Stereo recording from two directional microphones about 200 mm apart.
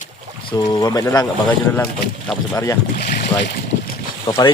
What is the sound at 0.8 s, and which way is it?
Speech, 15° left (ahead or behind).